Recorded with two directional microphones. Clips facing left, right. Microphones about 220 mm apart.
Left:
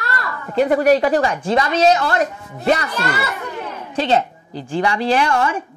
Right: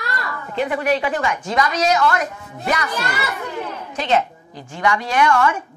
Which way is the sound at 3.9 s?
30° left (ahead or behind).